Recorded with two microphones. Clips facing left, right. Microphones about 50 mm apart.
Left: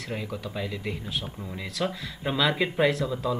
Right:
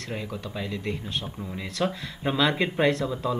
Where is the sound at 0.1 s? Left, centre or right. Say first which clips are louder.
Even; centre.